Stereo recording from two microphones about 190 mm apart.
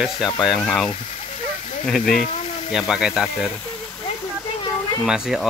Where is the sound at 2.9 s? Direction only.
5° right (ahead or behind).